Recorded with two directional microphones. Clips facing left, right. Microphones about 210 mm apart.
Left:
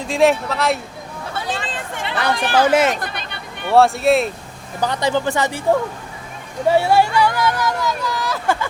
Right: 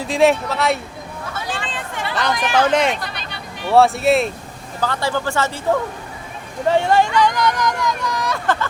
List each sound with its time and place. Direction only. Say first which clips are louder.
0.1 s speech: even; centre (ahead or behind)
1.6 s hubbub: even; 40° left (ahead or behind)
2.3 s speech: left 2 dB; 30° left (ahead or behind)
2.6 s speech: left 2 dB; 5° left (ahead or behind)
2.9 s hubbub: left 1 dB; 50° left (ahead or behind)
3.7 s speech: even; centre (ahead or behind)
4.8 s speech: left 2 dB; 15° left (ahead or behind)
6.7 s speech: left 1 dB; 10° left (ahead or behind)